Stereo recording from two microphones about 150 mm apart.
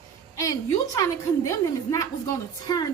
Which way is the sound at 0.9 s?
20° left (ahead or behind).